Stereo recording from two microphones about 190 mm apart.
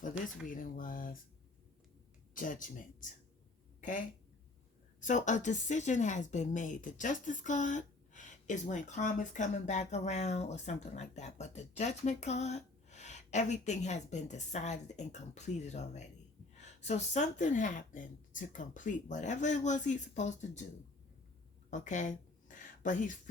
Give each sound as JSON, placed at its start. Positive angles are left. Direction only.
{"t": 0.4, "sound": "speech", "side_deg": 45}
{"t": 2.3, "sound": "speech", "side_deg": 45}
{"t": 3.8, "sound": "a sound", "side_deg": 40}
{"t": 4.9, "sound": "speech", "side_deg": 40}
{"t": 21.7, "sound": "speech", "side_deg": 40}